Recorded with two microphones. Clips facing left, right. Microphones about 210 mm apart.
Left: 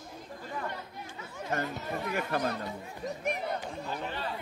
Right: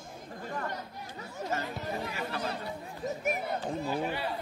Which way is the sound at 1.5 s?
50° left (ahead or behind).